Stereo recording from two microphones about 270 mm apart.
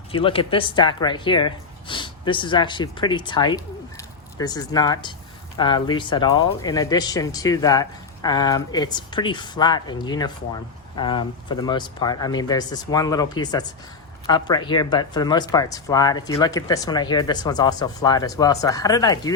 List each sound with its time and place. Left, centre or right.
0.1 s speech: centre